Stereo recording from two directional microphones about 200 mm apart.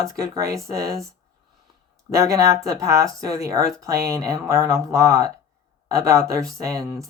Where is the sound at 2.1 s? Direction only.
15° right (ahead or behind).